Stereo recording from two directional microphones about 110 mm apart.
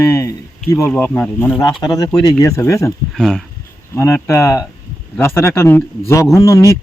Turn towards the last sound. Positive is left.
turn(degrees=30)  # may be behind; listen again after turning